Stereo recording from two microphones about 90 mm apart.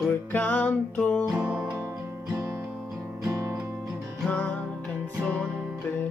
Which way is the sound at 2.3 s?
30° right (ahead or behind).